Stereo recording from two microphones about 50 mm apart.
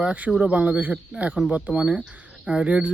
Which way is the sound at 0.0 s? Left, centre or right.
Right.